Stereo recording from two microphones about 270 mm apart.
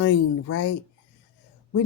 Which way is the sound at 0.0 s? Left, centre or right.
Left.